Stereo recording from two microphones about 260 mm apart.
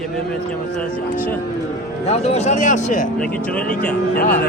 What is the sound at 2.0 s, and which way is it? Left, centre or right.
Speech, left.